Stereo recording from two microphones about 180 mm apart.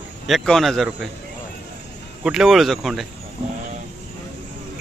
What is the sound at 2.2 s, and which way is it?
Speech, centre (ahead or behind).